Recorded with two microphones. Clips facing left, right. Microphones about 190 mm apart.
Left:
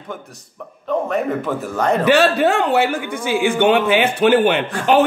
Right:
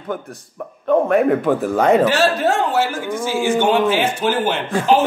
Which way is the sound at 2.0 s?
65° left (ahead or behind).